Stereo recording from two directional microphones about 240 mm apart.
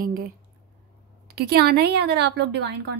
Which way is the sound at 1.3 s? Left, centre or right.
Right.